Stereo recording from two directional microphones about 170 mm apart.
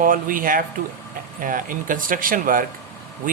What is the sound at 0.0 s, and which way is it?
Speech, 55° right (ahead or behind).